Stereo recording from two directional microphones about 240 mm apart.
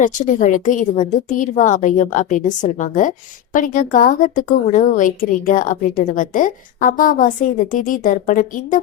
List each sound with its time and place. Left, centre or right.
0.0 s a woman's voice: left